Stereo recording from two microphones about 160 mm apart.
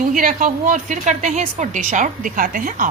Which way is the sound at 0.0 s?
55° right (ahead or behind).